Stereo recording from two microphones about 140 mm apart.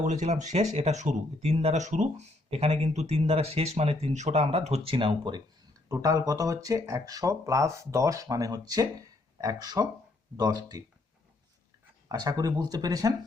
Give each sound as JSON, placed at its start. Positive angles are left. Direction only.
{"t": 0.0, "sound": "speech", "side_deg": -60}
{"t": 5.9, "sound": "speech", "side_deg": -25}
{"t": 12.0, "sound": "speech", "side_deg": -25}